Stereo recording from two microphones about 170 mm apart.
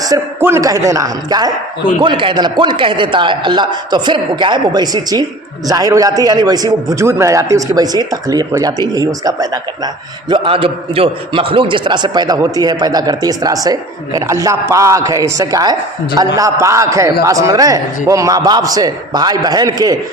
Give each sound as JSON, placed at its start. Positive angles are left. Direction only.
{"t": 0.0, "sound": "a man's voice", "side_deg": -15}